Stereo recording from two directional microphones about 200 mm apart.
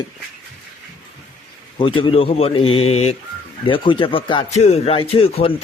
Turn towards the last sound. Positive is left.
turn(degrees=30)  # may be behind; listen again after turning